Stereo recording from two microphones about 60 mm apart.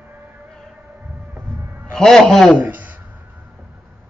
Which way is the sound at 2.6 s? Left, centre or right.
Right.